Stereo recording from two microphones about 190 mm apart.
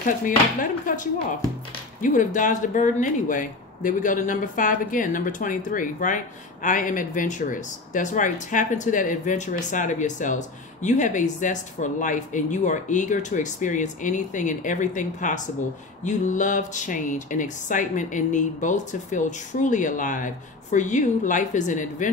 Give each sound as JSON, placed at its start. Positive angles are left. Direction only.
{"t": 0.0, "sound": "speech", "side_deg": 45}